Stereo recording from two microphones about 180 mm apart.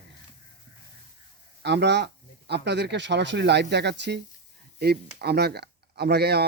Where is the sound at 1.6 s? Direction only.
70° right (ahead or behind).